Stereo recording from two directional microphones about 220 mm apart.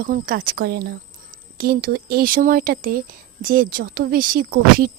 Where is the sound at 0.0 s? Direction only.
40° right (ahead or behind).